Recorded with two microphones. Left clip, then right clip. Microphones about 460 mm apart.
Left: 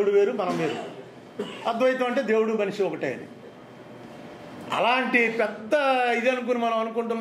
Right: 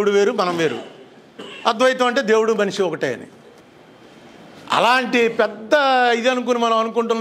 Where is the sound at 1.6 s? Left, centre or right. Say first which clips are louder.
Right 7 dB; right.